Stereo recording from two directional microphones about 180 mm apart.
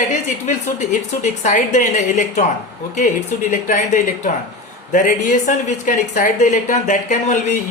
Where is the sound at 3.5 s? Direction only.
45° left (ahead or behind).